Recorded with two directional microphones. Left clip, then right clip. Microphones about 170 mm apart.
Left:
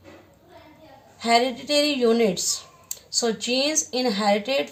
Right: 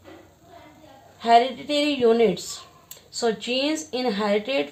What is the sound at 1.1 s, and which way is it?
Speech, 40° right (ahead or behind).